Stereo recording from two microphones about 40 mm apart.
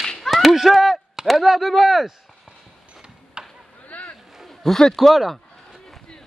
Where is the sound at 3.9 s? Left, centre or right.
Left.